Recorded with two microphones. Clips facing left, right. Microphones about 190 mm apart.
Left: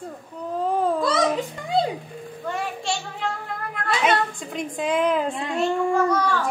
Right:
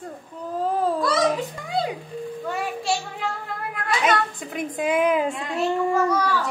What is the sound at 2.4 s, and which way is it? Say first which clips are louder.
Child singing: left 1 dB; 5° right (ahead or behind).